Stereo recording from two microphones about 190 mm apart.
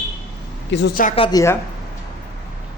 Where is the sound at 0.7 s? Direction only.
70° left (ahead or behind).